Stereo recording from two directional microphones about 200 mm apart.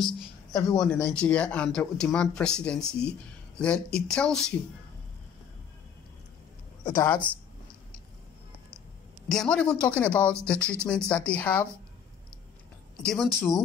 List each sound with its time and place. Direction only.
0.5 s speech: 15° left (ahead or behind)
0.7 s speech: 5° left (ahead or behind)
9.3 s speech: 5° left (ahead or behind)
12.9 s speech: centre (ahead or behind)